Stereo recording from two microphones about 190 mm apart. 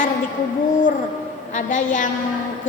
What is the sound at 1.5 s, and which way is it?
Speech, 40° left (ahead or behind).